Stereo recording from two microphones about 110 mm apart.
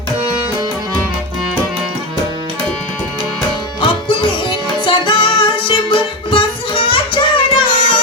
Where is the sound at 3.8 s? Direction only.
50° left (ahead or behind).